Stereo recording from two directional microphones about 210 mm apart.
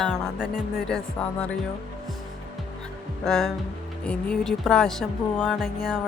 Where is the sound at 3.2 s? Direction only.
Centre (ahead or behind).